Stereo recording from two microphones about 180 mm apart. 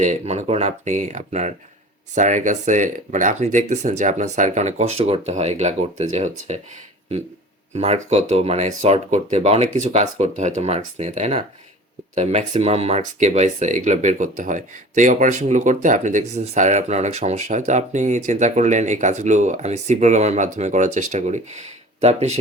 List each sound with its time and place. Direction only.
0.0 s speech: 40° right (ahead or behind)
7.7 s speech: 40° right (ahead or behind)